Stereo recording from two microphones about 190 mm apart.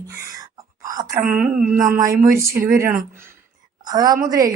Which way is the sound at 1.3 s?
5° right (ahead or behind).